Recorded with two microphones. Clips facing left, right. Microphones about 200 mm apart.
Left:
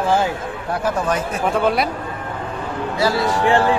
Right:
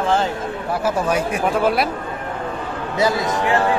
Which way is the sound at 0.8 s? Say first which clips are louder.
Right 1 dB; 10° right (ahead or behind).